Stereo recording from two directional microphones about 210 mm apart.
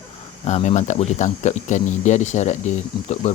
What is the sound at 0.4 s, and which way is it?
Speech, 35° left (ahead or behind).